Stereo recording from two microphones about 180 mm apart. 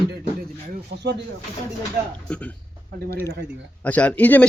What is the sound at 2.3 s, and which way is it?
Speech, 5° left (ahead or behind).